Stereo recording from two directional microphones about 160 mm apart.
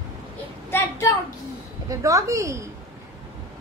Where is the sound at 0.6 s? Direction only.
15° left (ahead or behind).